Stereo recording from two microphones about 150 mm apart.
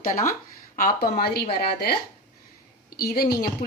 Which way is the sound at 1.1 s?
90° left.